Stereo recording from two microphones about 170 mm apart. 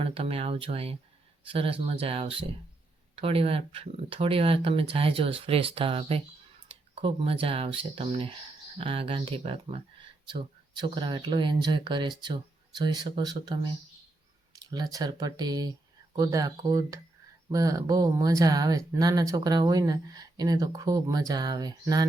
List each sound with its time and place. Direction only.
0.0 s speech: 35° right (ahead or behind)
14.5 s speech: 25° right (ahead or behind)